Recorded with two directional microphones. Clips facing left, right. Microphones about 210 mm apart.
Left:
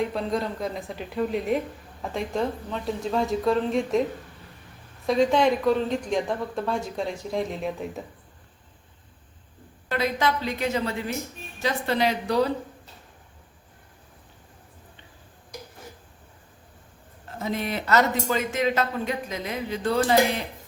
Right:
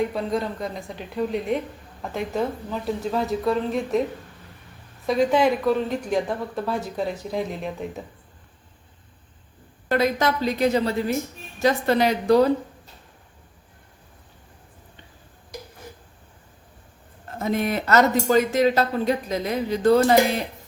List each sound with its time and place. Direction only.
0.0 s speech: centre (ahead or behind)
5.0 s speech: 5° right (ahead or behind)
9.9 s a woman's voice: 45° right (ahead or behind)
17.4 s speech: 50° right (ahead or behind)